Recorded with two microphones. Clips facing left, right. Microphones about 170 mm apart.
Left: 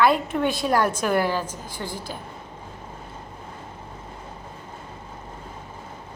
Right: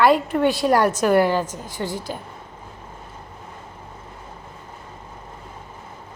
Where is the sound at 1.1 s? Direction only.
50° right (ahead or behind).